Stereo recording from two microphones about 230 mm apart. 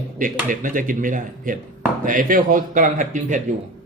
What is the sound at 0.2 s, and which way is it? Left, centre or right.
Speech, right.